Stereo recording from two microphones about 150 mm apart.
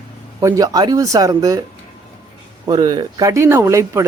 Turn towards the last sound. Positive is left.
turn(degrees=-20)  # may be behind; listen again after turning